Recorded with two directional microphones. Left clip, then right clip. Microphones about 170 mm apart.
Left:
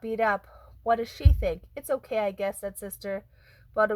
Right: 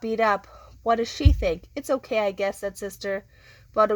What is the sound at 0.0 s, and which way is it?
Speech, 20° right (ahead or behind).